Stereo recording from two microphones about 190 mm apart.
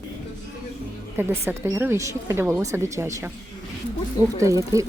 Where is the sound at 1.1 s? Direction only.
10° right (ahead or behind).